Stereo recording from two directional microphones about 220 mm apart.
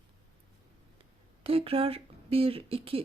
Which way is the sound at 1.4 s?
25° right (ahead or behind).